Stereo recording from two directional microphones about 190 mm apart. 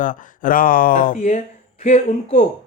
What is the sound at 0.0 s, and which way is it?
Speech, 45° left (ahead or behind).